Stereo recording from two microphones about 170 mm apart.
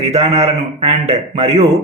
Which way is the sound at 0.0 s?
40° right (ahead or behind).